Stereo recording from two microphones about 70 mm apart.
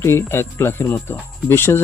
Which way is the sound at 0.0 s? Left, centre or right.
Left.